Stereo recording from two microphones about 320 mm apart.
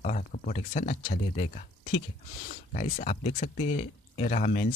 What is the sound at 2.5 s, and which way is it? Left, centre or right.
Speech, left.